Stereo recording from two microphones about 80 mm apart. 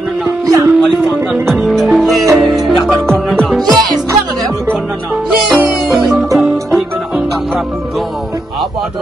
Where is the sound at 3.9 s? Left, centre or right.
Right.